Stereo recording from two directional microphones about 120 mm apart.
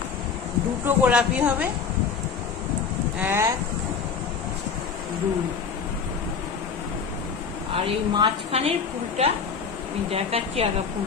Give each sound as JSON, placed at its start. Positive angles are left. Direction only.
{"t": 0.8, "sound": "a woman's voice", "side_deg": -10}
{"t": 3.2, "sound": "speech", "side_deg": -20}
{"t": 7.7, "sound": "a woman's voice", "side_deg": -45}